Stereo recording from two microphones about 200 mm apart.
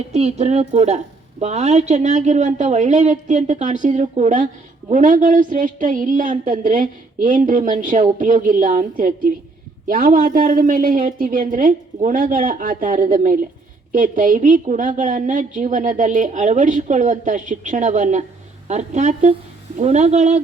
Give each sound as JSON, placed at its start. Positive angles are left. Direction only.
{"t": 0.1, "sound": "a woman's voice", "side_deg": -30}